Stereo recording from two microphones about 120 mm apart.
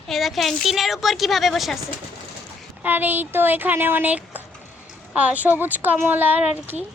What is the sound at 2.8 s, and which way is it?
Speech, 15° right (ahead or behind).